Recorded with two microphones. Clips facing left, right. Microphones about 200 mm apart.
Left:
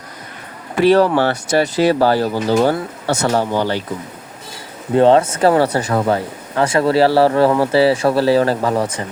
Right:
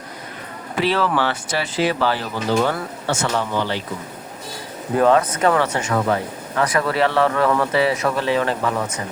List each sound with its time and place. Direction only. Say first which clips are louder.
0.8 s speech: left 8 dB; 45° left (ahead or behind)
4.9 s speech: left 5 dB; 30° left (ahead or behind)